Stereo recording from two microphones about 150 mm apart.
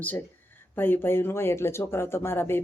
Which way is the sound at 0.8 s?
15° left (ahead or behind).